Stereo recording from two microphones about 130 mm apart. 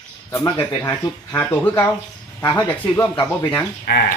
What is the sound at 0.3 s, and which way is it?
Speech, 20° left (ahead or behind).